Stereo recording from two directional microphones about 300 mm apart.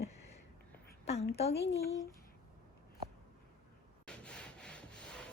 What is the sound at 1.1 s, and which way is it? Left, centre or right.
Speech, left.